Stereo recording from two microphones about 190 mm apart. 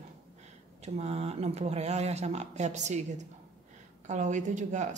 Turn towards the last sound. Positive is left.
turn(degrees=-40)  # may be behind; listen again after turning